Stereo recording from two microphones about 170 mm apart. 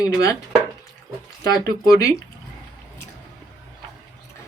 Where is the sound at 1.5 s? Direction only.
20° left (ahead or behind).